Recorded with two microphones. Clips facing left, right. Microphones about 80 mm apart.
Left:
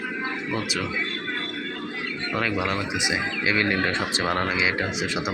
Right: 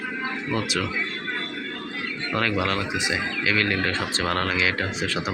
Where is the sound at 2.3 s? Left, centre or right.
Centre.